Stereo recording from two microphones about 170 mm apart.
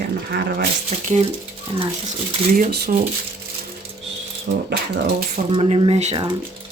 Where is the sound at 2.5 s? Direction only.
60° right (ahead or behind).